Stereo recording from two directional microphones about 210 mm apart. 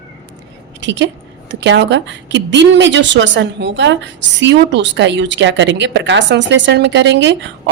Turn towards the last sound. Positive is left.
turn(degrees=-60)  # may be behind; listen again after turning